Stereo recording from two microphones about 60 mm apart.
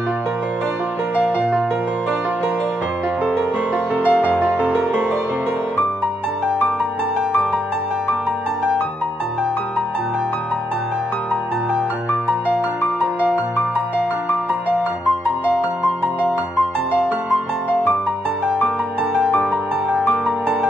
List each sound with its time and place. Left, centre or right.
1.1 s music: centre
3.9 s music: right
20.0 s music: centre